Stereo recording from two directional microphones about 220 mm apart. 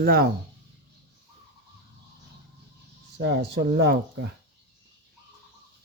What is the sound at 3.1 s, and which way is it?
Speech, 50° right (ahead or behind).